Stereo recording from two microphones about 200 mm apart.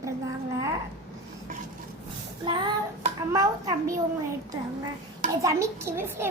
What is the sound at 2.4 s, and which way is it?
Child singing, 25° right (ahead or behind).